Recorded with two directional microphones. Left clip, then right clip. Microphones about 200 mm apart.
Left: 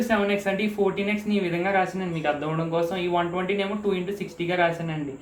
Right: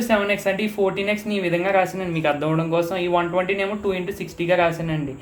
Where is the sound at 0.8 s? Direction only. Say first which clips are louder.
Right 3 dB; 45° right (ahead or behind).